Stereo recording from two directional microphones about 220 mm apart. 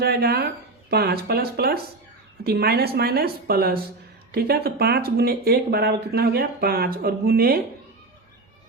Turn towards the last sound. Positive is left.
turn(degrees=-45)  # may be behind; listen again after turning